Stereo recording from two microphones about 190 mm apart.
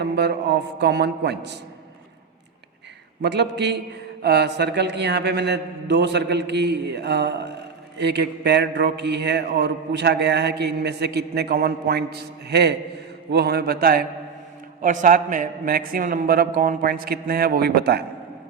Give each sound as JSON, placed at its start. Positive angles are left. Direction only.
{"t": 0.0, "sound": "mantra", "side_deg": -65}
{"t": 3.2, "sound": "mantra", "side_deg": -65}
{"t": 13.3, "sound": "a man's voice", "side_deg": -55}